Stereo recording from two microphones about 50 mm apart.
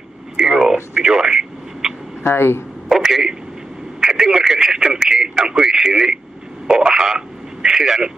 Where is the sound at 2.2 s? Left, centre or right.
Left.